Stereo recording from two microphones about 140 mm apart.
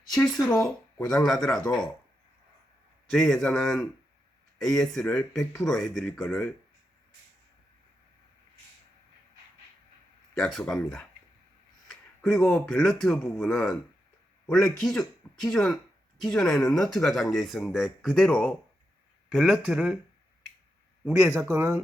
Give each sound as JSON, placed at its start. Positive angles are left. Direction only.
{"t": 0.1, "sound": "speech", "side_deg": 5}
{"t": 0.5, "sound": "speech", "side_deg": 20}
{"t": 1.0, "sound": "speech", "side_deg": 5}
{"t": 3.1, "sound": "speech", "side_deg": 0}
{"t": 10.4, "sound": "speech", "side_deg": 5}
{"t": 21.1, "sound": "speech", "side_deg": -20}